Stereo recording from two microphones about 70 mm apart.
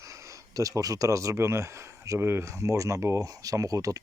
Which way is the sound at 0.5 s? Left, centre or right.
Right.